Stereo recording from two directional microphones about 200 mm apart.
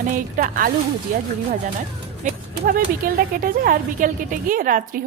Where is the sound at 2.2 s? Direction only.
40° right (ahead or behind).